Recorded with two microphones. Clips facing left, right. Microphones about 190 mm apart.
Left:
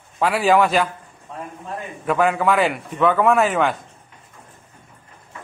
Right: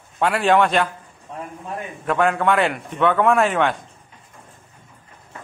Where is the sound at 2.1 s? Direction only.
5° left (ahead or behind).